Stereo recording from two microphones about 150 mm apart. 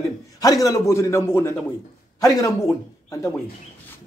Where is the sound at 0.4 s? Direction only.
25° left (ahead or behind).